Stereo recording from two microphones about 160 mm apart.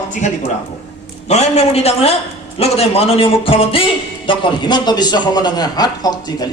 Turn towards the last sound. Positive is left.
turn(degrees=25)  # may be behind; listen again after turning